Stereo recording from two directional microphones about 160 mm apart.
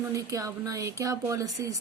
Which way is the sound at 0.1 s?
20° right (ahead or behind).